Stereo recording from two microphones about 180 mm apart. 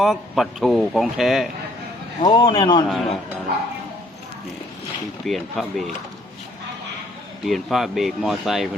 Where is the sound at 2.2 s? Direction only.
25° left (ahead or behind).